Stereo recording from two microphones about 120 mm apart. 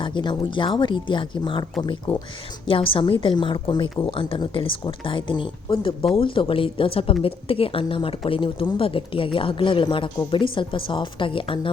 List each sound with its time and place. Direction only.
0.0 s speech: 40° left (ahead or behind)
2.1 s a woman's voice: 55° left (ahead or behind)